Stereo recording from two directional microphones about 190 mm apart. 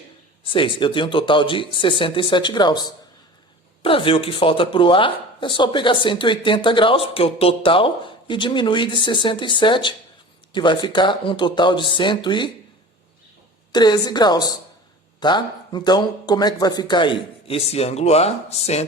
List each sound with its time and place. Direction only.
0.4 s speech: 25° left (ahead or behind)
3.8 s speech: 30° left (ahead or behind)
13.7 s speech: 20° left (ahead or behind)